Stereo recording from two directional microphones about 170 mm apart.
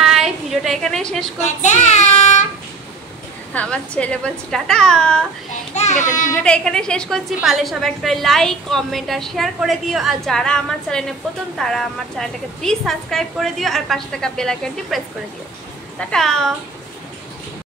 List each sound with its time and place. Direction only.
0.0 s a sound: centre (ahead or behind)
1.4 s child singing: 45° left (ahead or behind)
3.5 s a woman's voice: 5° left (ahead or behind)
5.8 s speech: 45° left (ahead or behind)
6.4 s a woman's voice: 5° left (ahead or behind)
16.0 s a woman's voice: 5° left (ahead or behind)